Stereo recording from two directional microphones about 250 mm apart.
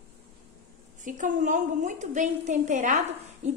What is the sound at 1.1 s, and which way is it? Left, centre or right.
A woman's voice, right.